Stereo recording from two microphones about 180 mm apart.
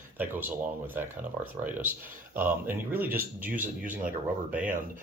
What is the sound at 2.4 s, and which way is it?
Speech, 10° right (ahead or behind).